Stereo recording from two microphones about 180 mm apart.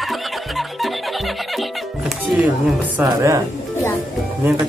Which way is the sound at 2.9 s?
15° right (ahead or behind).